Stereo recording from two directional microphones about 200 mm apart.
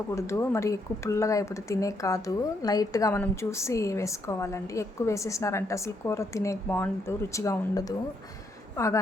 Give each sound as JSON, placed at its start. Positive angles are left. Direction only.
{"t": 0.2, "sound": "speech", "side_deg": 15}